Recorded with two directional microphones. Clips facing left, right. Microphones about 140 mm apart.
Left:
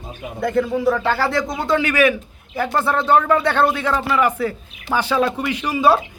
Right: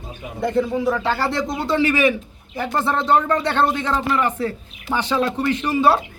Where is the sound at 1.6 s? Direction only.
30° right (ahead or behind).